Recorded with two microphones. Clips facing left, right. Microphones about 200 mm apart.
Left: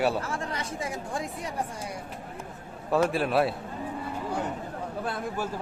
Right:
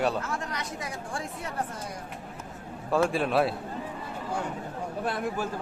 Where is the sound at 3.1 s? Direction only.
Centre (ahead or behind).